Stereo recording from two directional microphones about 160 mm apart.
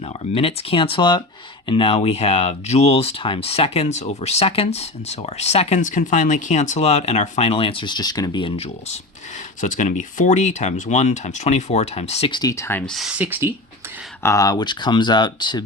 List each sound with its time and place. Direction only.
0.0 s speech: 40° left (ahead or behind)
9.6 s speech: 50° left (ahead or behind)
12.3 s speech: 25° left (ahead or behind)
12.8 s speech: centre (ahead or behind)
14.2 s speech: 20° left (ahead or behind)